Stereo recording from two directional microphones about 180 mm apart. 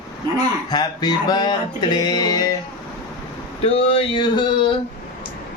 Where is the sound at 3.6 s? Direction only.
35° left (ahead or behind).